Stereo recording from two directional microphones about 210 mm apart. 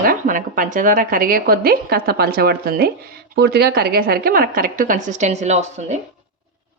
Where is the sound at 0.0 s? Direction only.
40° right (ahead or behind).